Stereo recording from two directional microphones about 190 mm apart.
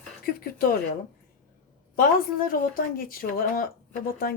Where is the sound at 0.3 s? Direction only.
50° left (ahead or behind).